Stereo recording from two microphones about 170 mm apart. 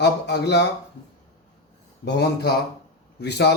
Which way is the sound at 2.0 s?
75° left (ahead or behind).